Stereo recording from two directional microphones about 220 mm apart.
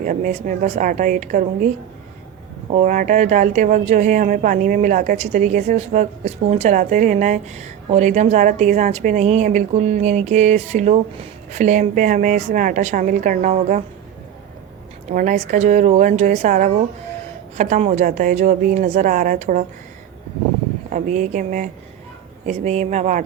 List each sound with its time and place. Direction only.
0.0 s speech: 35° right (ahead or behind)
2.7 s speech: 35° right (ahead or behind)
15.1 s speech: 35° right (ahead or behind)
20.9 s speech: 35° right (ahead or behind)